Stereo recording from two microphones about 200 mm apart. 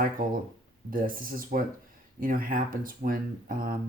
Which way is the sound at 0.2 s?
45° right (ahead or behind).